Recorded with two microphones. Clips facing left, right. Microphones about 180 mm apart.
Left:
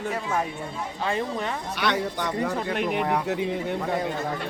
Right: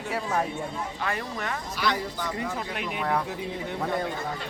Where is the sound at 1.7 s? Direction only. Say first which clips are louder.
Left 3 dB; 65° left (ahead or behind).